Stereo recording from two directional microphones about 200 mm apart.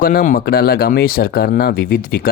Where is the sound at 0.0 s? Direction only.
45° left (ahead or behind).